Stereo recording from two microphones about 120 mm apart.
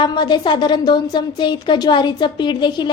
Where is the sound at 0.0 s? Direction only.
40° left (ahead or behind).